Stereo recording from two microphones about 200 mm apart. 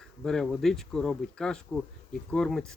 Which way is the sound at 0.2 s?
5° left (ahead or behind).